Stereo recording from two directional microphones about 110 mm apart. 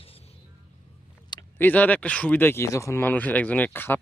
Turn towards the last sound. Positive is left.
turn(degrees=20)  # may be behind; listen again after turning